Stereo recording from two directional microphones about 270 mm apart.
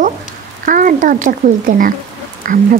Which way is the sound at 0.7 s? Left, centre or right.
Right.